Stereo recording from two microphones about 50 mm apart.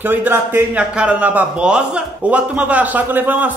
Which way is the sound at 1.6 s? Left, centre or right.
Right.